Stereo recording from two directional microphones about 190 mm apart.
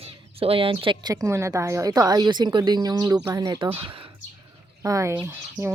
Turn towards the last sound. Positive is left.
turn(degrees=-15)  # may be behind; listen again after turning